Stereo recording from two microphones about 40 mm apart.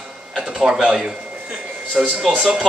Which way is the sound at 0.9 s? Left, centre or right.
Centre.